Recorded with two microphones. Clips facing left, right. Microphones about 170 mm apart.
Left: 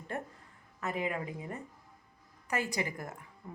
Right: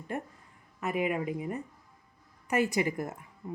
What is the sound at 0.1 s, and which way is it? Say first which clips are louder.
Speech: right 3 dB; 15° right (ahead or behind).